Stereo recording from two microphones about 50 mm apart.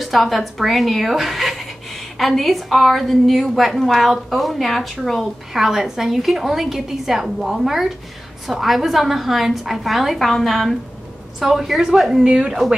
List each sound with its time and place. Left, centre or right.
0.0 s a woman's voice: centre